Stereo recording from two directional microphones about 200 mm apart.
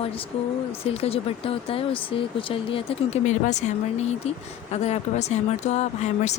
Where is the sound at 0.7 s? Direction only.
30° left (ahead or behind).